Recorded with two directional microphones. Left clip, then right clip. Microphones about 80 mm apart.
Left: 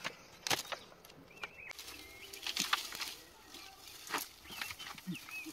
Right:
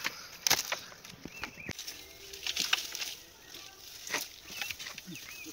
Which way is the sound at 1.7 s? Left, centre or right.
Right.